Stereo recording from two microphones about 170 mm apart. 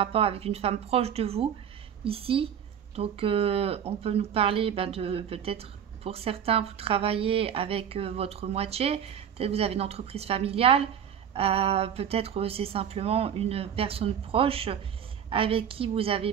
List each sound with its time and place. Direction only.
0.0 s speech: 35° right (ahead or behind)